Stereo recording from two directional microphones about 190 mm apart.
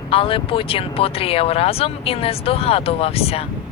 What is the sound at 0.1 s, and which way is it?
Speech, 30° left (ahead or behind).